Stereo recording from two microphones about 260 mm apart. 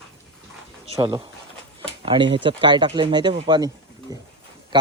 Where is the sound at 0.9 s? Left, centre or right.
Centre.